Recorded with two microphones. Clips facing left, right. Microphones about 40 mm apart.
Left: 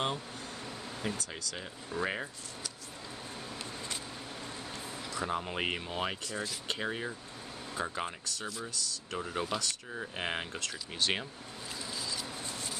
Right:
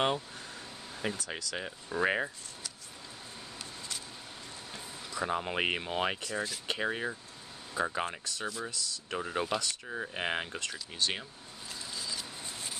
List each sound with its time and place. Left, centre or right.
1.0 s speech: centre
4.7 s speech: centre
6.2 s speech: centre
11.9 s a sound: centre